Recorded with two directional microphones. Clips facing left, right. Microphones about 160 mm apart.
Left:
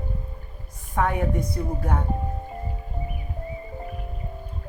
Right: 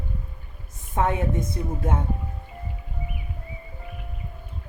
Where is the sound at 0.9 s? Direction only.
20° right (ahead or behind).